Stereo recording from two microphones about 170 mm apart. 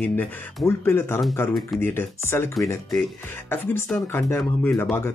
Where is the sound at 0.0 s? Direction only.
10° left (ahead or behind).